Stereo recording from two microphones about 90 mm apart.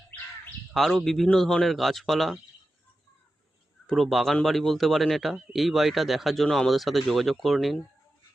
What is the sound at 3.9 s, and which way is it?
Speech, centre (ahead or behind).